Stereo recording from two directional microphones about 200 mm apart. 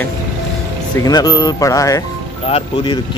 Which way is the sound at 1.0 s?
20° left (ahead or behind).